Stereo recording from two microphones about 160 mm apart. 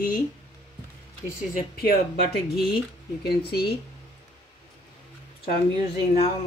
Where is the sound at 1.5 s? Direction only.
65° left (ahead or behind).